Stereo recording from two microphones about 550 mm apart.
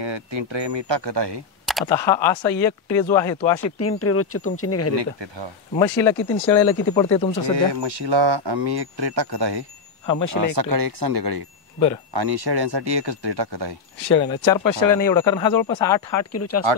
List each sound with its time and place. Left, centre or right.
0.0 s speech: right
1.7 s speech: centre
3.6 s speech: left
4.9 s speech: right
5.8 s speech: centre
7.8 s speech: right
10.0 s speech: left
10.5 s speech: right
14.2 s speech: centre
14.6 s speech: left
15.0 s speech: centre
16.1 s speech: left